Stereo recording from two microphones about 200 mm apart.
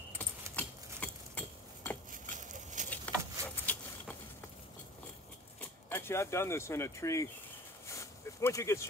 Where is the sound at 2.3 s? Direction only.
40° right (ahead or behind).